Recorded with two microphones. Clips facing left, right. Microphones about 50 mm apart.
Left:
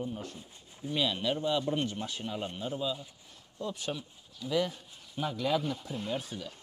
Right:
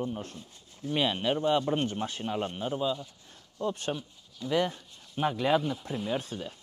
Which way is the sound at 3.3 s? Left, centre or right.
Right.